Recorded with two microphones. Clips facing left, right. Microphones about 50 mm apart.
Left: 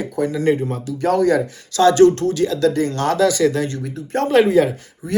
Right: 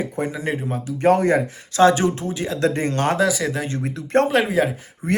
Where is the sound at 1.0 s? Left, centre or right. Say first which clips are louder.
Even; right.